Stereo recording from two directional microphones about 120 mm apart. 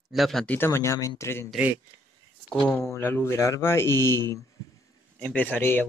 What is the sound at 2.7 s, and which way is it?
Speech, 20° left (ahead or behind).